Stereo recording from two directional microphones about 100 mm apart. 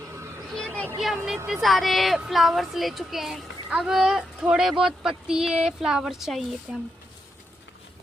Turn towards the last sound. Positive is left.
turn(degrees=-5)  # may be behind; listen again after turning